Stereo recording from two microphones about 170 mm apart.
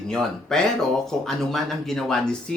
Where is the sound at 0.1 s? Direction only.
5° left (ahead or behind).